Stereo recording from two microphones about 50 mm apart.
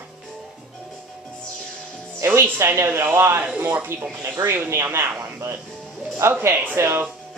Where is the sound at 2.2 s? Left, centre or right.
Right.